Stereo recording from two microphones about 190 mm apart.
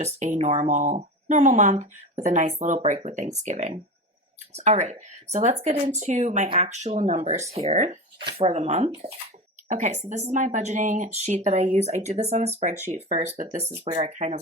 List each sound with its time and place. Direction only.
0.0 s speech: 35° right (ahead or behind)